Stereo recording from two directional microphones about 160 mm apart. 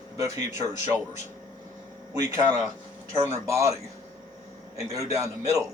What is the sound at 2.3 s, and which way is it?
A man's voice, 15° right (ahead or behind).